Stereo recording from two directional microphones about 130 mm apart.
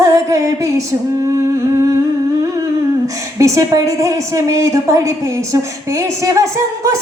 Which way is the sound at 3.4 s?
25° right (ahead or behind).